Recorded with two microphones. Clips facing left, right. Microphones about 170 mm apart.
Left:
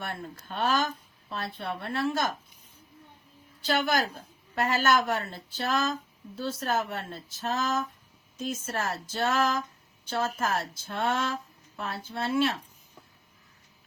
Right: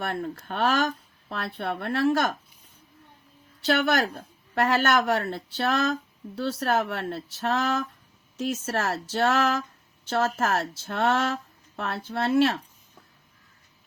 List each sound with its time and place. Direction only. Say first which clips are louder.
0.0 s speech: right 7 dB; 55° right (ahead or behind)
3.7 s a woman's voice: right 4 dB; 70° right (ahead or behind)